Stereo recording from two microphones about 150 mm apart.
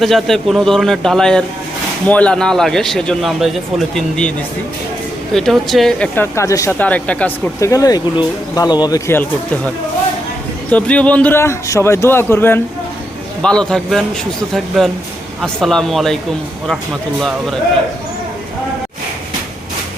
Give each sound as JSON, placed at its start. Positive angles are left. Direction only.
{"t": 0.0, "sound": "speech", "side_deg": 0}
{"t": 5.3, "sound": "speech", "side_deg": 0}
{"t": 6.1, "sound": "speech", "side_deg": 20}
{"t": 6.7, "sound": "a man's voice", "side_deg": 10}
{"t": 7.6, "sound": "speech", "side_deg": 20}
{"t": 10.7, "sound": "a man's voice", "side_deg": 10}
{"t": 15.4, "sound": "speech", "side_deg": 0}